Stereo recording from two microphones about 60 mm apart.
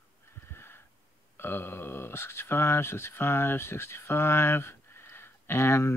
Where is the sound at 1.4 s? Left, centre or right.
Left.